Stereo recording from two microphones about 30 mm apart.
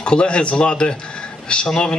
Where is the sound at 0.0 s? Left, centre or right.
Left.